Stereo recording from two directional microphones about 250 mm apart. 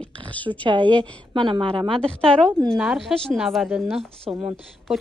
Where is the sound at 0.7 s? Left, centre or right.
Centre.